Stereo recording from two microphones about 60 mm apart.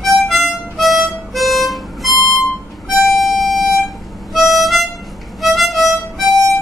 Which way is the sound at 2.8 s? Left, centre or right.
Centre.